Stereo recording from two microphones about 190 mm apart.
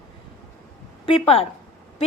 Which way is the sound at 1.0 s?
30° left (ahead or behind).